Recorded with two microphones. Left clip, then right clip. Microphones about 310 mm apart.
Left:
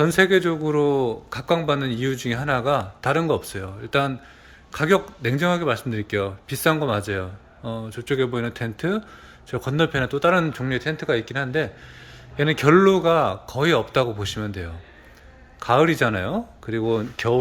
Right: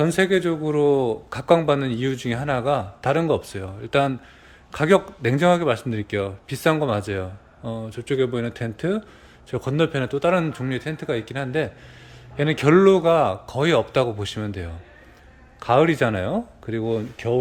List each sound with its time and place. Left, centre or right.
0.0 s a man's voice: centre